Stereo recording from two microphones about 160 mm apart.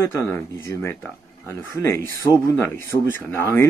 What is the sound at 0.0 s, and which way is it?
Speech, 20° left (ahead or behind).